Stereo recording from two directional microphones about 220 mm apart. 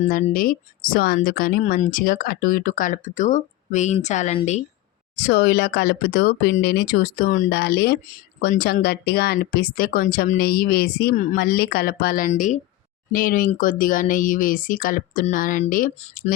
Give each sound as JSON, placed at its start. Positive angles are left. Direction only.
{"t": 0.1, "sound": "speech", "side_deg": 40}
{"t": 5.1, "sound": "speech", "side_deg": 45}